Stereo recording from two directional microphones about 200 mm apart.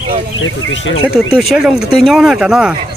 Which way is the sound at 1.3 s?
Centre (ahead or behind).